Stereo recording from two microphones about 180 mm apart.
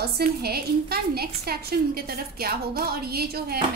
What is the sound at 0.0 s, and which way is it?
A woman's voice, 60° right (ahead or behind).